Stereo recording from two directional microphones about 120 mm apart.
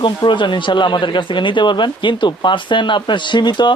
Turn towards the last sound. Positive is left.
turn(degrees=40)  # may be behind; listen again after turning